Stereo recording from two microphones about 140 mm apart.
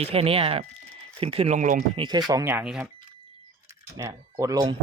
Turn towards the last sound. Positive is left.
turn(degrees=-25)  # may be behind; listen again after turning